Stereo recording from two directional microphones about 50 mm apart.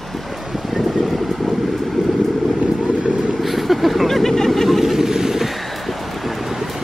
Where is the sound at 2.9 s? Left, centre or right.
Right.